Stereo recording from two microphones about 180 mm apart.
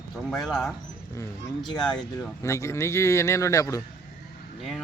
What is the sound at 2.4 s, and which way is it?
Speech, 15° left (ahead or behind).